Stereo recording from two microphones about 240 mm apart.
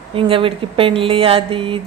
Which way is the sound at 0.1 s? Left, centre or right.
Right.